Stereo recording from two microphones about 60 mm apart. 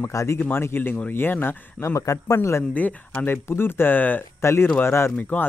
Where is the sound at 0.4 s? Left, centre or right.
Left.